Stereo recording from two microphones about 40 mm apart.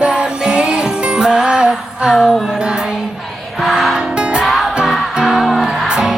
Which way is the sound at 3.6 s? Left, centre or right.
Centre.